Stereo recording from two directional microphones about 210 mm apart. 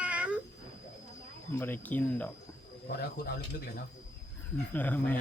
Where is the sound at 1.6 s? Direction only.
10° left (ahead or behind).